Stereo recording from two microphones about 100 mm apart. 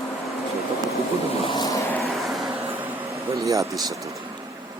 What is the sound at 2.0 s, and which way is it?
Vehicle, centre (ahead or behind).